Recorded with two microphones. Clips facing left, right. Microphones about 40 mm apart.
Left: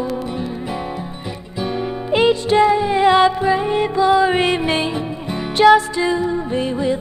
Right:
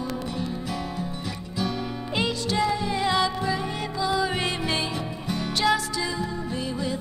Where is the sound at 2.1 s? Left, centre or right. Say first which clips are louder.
Left 12 dB; left.